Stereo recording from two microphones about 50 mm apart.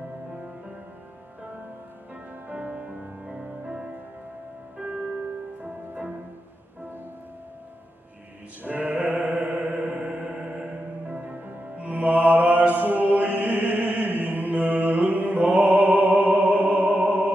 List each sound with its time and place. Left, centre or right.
2.5 s music: centre
5.6 s music: right
8.6 s music: right